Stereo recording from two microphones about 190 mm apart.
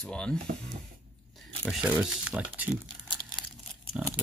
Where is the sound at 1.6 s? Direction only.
5° right (ahead or behind).